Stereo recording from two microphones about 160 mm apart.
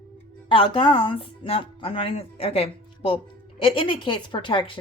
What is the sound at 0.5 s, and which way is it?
Speech, 30° left (ahead or behind).